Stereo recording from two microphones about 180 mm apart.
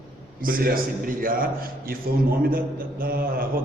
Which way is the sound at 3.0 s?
55° right (ahead or behind).